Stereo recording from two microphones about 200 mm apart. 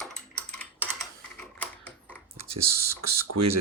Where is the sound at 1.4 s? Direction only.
5° left (ahead or behind).